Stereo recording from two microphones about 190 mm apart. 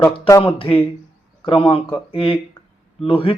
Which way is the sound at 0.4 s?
30° left (ahead or behind).